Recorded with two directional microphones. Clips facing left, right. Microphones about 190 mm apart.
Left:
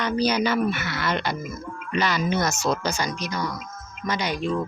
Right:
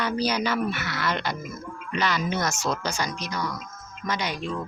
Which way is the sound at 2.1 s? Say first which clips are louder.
Left 3 dB; 40° left (ahead or behind).